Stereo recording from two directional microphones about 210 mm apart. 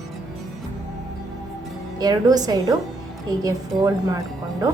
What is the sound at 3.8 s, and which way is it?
Speech, 15° right (ahead or behind).